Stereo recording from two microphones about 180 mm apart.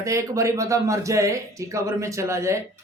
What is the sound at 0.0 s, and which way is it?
Speech, 15° right (ahead or behind).